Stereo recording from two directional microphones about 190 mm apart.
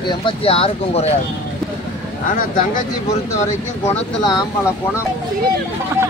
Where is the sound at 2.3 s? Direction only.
50° left (ahead or behind).